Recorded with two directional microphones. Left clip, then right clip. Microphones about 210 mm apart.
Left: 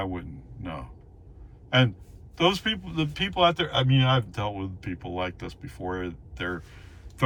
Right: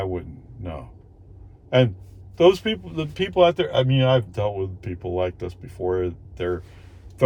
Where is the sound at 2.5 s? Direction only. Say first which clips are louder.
Right 5 dB; 30° right (ahead or behind).